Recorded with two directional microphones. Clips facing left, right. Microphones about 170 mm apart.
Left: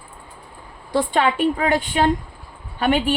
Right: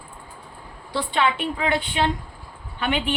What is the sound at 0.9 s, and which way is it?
A woman's voice, 45° left (ahead or behind).